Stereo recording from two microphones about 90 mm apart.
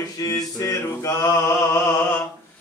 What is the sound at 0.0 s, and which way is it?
Mantra, 40° left (ahead or behind).